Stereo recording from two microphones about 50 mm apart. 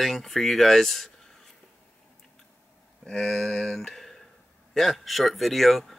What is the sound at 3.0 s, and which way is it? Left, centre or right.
Speech, centre.